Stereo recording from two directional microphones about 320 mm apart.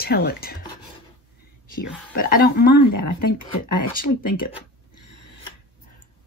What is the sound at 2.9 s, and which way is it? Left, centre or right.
Speech, left.